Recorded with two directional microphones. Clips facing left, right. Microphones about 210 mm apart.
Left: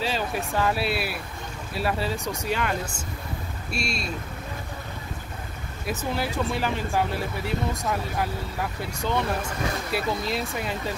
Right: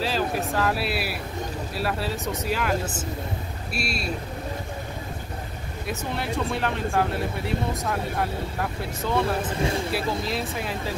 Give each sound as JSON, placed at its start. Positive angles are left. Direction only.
{"t": 0.0, "sound": "speech", "side_deg": 0}
{"t": 5.9, "sound": "speech", "side_deg": 0}
{"t": 9.6, "sound": "speech", "side_deg": -25}
{"t": 9.9, "sound": "speech", "side_deg": 0}